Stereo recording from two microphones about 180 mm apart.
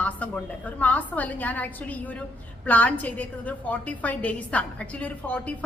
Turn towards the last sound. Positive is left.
turn(degrees=10)  # may be behind; listen again after turning